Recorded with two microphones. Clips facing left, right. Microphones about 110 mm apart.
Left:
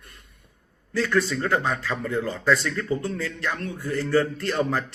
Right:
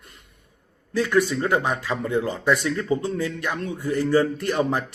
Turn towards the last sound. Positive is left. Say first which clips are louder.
# right 2 dB
turn(degrees=-15)  # may be behind; listen again after turning